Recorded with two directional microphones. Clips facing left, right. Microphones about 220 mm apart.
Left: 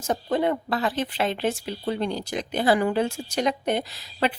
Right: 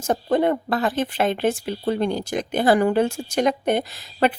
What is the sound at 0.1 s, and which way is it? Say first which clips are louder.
A woman's voice: right 4 dB; 50° right (ahead or behind).